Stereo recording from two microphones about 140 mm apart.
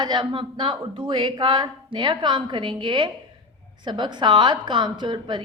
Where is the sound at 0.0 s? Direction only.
30° right (ahead or behind).